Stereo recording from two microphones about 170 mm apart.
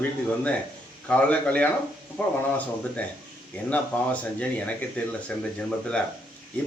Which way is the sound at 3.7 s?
10° left (ahead or behind).